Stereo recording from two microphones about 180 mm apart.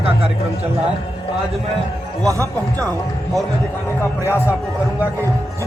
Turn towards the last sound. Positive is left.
turn(degrees=15)  # may be behind; listen again after turning